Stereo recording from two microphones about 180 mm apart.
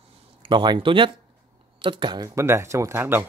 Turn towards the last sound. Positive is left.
turn(degrees=-15)  # may be behind; listen again after turning